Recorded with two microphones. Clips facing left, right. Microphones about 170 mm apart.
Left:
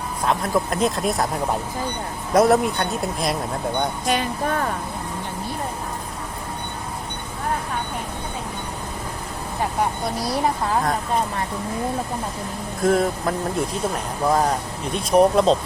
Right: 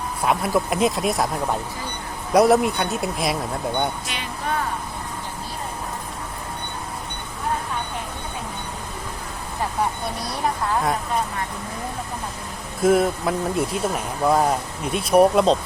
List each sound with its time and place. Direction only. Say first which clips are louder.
0.3 s speech: right 1 dB; 5° right (ahead or behind)
2.3 s speech: right 1 dB; centre (ahead or behind)
4.0 s speech: left 7 dB; 45° left (ahead or behind)
12.8 s speech: right 2 dB; 5° right (ahead or behind)